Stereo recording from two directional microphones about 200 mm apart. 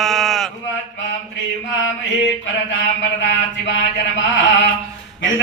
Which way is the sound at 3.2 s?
65° left (ahead or behind).